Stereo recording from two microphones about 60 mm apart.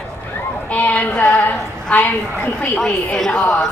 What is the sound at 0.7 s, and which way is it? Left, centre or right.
Speech, left.